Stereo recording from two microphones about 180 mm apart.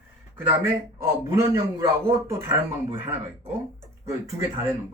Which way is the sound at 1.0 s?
15° right (ahead or behind).